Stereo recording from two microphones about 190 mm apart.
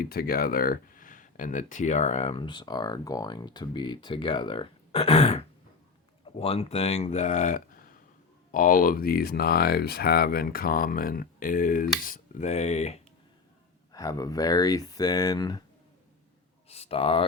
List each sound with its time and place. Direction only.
0.0 s speech: 50° left (ahead or behind); by 5.4 s 30° left (ahead or behind)
6.4 s speech: 30° left (ahead or behind)
13.9 s speech: 20° left (ahead or behind)
16.6 s speech: 30° left (ahead or behind)